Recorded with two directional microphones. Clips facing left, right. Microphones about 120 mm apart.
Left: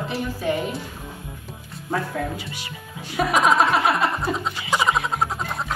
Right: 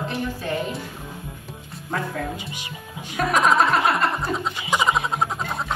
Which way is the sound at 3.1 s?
Centre (ahead or behind).